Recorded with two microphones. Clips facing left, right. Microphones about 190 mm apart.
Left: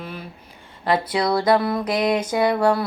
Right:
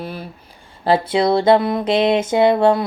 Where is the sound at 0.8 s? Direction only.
30° right (ahead or behind).